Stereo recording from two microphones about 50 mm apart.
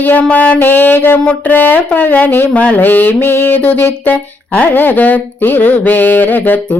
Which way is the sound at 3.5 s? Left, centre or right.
Left.